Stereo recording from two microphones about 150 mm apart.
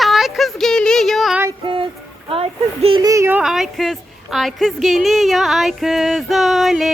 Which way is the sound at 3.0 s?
20° right (ahead or behind).